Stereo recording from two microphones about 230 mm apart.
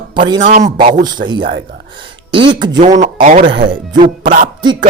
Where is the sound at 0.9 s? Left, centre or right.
Right.